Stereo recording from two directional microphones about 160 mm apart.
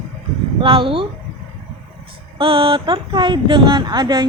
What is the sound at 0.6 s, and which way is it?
Speech, 35° right (ahead or behind).